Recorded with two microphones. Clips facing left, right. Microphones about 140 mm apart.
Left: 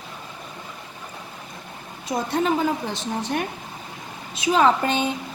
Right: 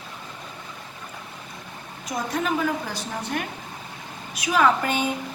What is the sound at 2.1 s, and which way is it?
Speech, 30° left (ahead or behind).